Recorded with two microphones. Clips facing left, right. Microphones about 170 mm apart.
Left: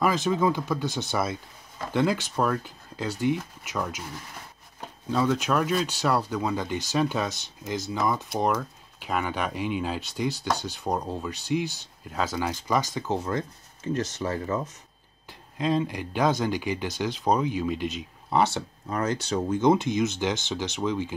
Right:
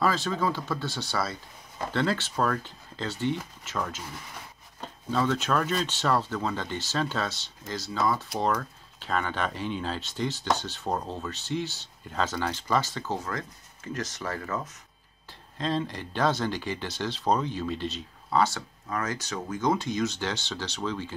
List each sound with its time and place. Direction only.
0.0 s speech: 15° left (ahead or behind)
15.5 s speech: 10° left (ahead or behind)